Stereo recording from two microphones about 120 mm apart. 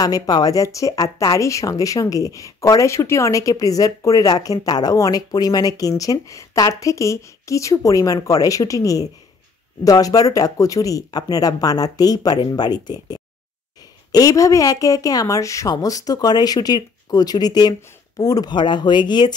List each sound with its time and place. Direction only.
0.0 s a woman's voice: 30° left (ahead or behind)